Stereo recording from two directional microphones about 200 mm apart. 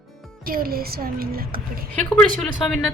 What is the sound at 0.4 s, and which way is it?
A woman's voice, 45° right (ahead or behind).